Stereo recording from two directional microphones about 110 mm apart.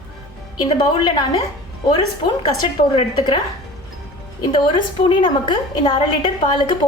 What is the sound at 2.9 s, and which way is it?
Speech, 55° left (ahead or behind).